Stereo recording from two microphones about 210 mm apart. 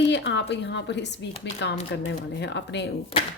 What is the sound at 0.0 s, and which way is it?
Speech, 55° left (ahead or behind).